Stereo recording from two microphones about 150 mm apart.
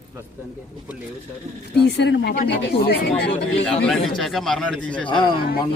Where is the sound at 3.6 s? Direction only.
Centre (ahead or behind).